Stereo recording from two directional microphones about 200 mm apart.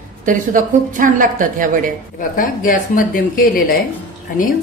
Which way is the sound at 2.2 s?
45° left (ahead or behind).